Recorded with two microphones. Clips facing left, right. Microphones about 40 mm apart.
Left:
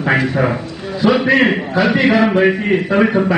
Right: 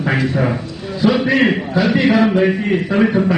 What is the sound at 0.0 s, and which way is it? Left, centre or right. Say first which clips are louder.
A man's voice: left 2 dB; centre.